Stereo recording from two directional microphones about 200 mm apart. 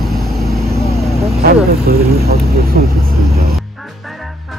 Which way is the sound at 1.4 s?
50° right (ahead or behind).